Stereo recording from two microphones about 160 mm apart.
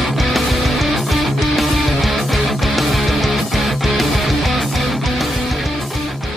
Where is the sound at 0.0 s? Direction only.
Centre (ahead or behind).